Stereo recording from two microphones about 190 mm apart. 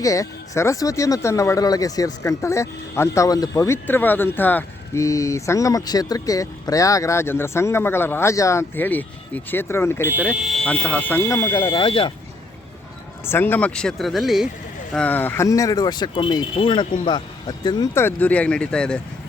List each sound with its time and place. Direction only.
0.0 s speech: 15° left (ahead or behind)
10.1 s speech: 5° right (ahead or behind); by 11.6 s 15° left (ahead or behind)
11.6 s speech: 25° left (ahead or behind)
13.2 s speech: 10° left (ahead or behind)